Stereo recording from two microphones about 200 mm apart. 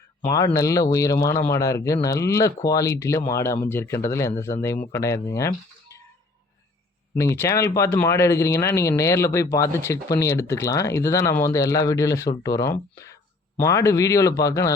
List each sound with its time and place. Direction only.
0.2 s speech: 15° left (ahead or behind)
7.2 s speech: 15° left (ahead or behind)